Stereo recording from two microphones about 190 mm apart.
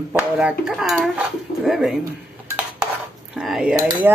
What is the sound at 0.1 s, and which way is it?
Speech, 5° right (ahead or behind).